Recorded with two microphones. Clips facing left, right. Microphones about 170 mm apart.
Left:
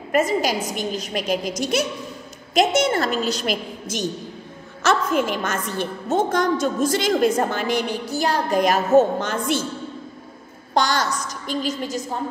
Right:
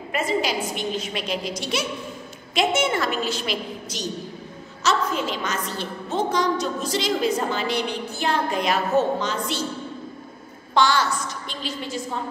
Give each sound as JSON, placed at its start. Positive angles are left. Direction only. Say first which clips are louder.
{"t": 0.1, "sound": "a woman's voice", "louder": "left 4 dB", "side_deg": 45}
{"t": 10.7, "sound": "a woman's voice", "louder": "right 1 dB", "side_deg": 40}